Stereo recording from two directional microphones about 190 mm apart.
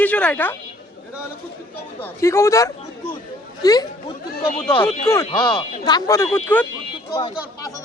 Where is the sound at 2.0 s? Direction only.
15° left (ahead or behind).